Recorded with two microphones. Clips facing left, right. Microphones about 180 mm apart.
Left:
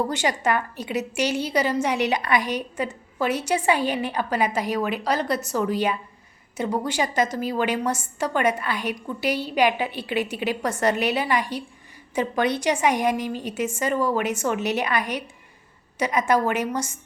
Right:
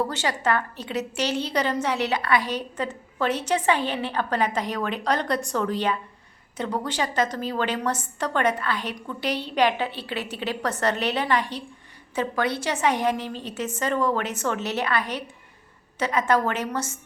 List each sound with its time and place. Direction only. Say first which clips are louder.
0.1 s a woman's voice: left 2 dB; 15° left (ahead or behind)